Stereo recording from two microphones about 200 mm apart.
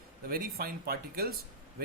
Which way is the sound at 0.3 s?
45° right (ahead or behind).